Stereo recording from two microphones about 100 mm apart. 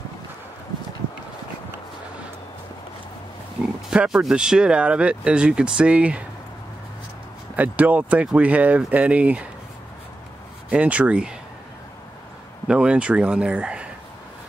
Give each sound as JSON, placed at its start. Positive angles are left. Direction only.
{"t": 3.9, "sound": "speech", "side_deg": -5}
{"t": 7.5, "sound": "speech", "side_deg": -15}
{"t": 10.7, "sound": "speech", "side_deg": -15}
{"t": 12.6, "sound": "speech", "side_deg": -10}